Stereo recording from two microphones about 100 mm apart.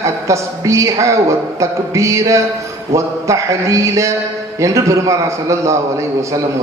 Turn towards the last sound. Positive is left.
turn(degrees=-30)  # may be behind; listen again after turning